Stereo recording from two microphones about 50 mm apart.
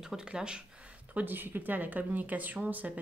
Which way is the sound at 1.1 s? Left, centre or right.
Right.